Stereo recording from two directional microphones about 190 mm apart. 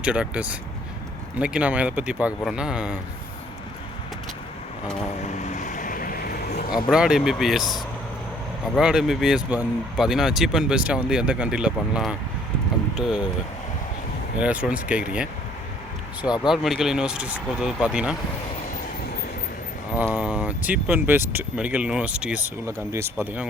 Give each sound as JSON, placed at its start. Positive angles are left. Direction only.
{"t": 0.0, "sound": "speech", "side_deg": -5}
{"t": 5.2, "sound": "boat", "side_deg": 40}
{"t": 6.9, "sound": "speech", "side_deg": -5}
{"t": 14.3, "sound": "speech", "side_deg": -5}
{"t": 16.2, "sound": "speech", "side_deg": 20}
{"t": 16.5, "sound": "speech", "side_deg": 0}
{"t": 20.1, "sound": "speech", "side_deg": -5}